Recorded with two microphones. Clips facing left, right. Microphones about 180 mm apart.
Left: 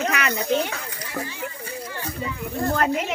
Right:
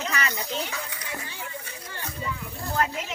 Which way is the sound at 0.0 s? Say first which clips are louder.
Left 6 dB; 60° left (ahead or behind).